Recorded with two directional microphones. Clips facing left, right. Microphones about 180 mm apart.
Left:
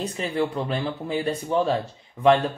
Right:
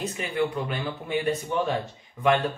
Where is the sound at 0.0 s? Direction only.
30° left (ahead or behind).